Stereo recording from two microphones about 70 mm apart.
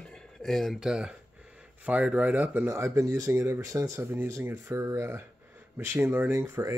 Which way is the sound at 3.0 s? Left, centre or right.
Right.